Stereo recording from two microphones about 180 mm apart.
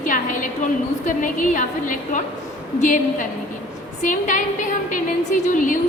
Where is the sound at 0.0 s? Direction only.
45° left (ahead or behind).